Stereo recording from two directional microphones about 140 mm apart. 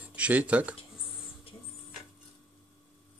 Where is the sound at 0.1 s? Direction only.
10° right (ahead or behind).